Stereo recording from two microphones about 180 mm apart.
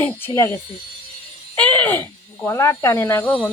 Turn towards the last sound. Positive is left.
turn(degrees=10)  # may be behind; listen again after turning